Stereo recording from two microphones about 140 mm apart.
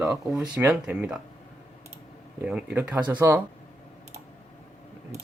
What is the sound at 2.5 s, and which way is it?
Speech, 10° right (ahead or behind).